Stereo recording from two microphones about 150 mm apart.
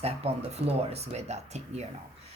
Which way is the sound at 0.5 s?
45° right (ahead or behind).